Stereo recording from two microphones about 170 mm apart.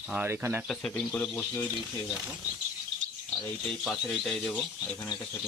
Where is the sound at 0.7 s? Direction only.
5° left (ahead or behind).